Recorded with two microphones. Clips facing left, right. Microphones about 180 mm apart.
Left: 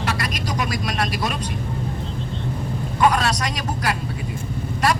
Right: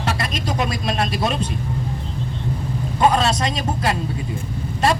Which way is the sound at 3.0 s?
25° right (ahead or behind).